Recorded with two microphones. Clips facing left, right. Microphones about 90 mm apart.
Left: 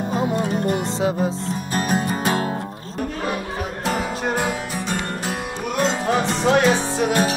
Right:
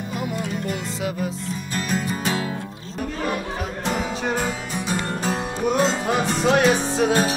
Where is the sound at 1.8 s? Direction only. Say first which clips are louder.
Left 4 dB; 50° left (ahead or behind).